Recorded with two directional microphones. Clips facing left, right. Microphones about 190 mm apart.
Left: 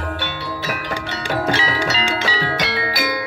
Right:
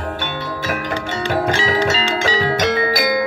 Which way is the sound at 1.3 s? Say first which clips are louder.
Right 2 dB; 45° right (ahead or behind).